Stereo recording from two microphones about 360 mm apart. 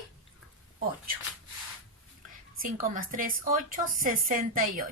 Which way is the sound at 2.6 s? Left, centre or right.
Right.